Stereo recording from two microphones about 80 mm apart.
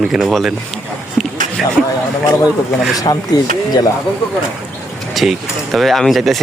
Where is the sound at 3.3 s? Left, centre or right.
Left.